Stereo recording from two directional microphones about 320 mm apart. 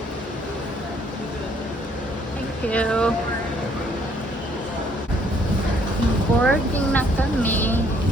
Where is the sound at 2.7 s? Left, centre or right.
Centre.